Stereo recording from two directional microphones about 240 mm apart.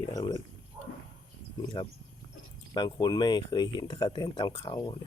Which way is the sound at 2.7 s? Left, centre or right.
Centre.